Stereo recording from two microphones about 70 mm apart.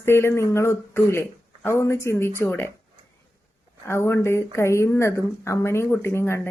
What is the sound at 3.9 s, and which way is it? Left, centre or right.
Speech, left.